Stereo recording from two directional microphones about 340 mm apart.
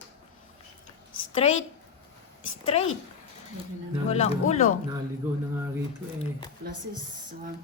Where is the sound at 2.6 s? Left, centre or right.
Centre.